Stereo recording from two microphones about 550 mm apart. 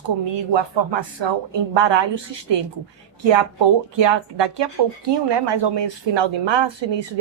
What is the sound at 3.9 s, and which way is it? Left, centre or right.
Speech, right.